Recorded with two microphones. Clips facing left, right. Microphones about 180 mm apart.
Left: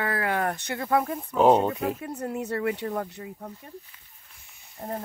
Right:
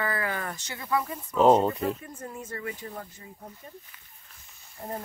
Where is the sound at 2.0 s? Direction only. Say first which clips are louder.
Left 8 dB; 70° left (ahead or behind).